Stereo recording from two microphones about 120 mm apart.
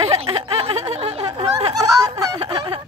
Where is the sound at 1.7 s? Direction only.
30° right (ahead or behind).